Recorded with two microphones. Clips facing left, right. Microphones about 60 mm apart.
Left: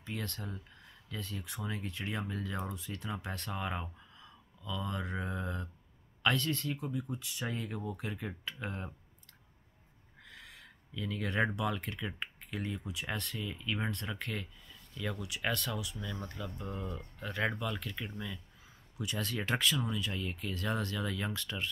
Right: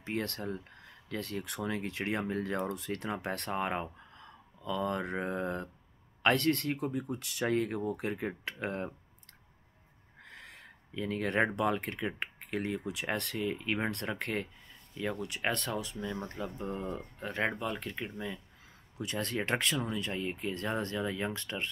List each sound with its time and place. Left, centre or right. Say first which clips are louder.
0.0 s speech: right 6 dB; right
6.2 s speech: right 4 dB; right
10.2 s a sound: right 3 dB; right
11.5 s speech: right 5 dB; right
15.0 s speech: right 4 dB; right
15.2 s speech: right 2 dB; right
21.3 s speech: right 2 dB; right